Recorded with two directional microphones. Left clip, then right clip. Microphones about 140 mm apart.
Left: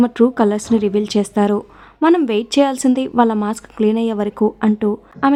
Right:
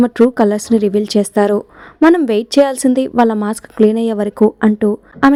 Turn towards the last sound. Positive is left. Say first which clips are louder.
# right 4 dB
turn(degrees=-35)  # may be behind; listen again after turning